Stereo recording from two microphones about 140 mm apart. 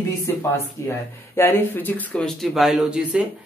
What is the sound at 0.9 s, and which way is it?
Speech, 15° left (ahead or behind).